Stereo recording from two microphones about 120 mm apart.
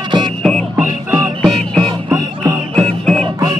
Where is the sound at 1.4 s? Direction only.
5° left (ahead or behind).